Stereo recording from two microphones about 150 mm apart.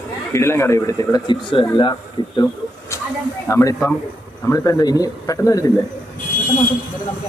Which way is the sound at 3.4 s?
15° left (ahead or behind).